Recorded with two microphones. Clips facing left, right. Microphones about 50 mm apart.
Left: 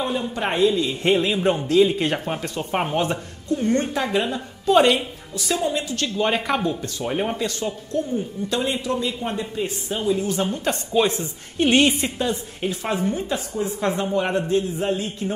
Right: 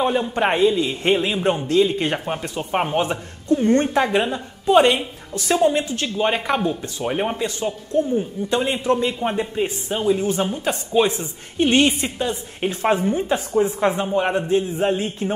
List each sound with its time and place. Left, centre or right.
0.0 s speech: right
0.6 s speech: centre
3.6 s speech: right
4.3 s speech: centre
5.3 s a woman's voice: right
5.9 s speech: centre
8.8 s speech: right
10.5 s a woman's voice: centre
12.6 s a woman's voice: right
13.0 s speech: right
13.9 s speech: centre